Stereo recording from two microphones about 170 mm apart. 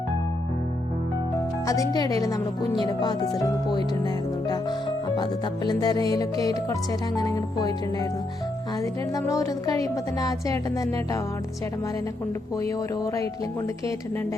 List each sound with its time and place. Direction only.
1.6 s a woman's voice: 20° left (ahead or behind)
5.1 s a woman's voice: 25° left (ahead or behind)
8.8 s a woman's voice: 20° left (ahead or behind)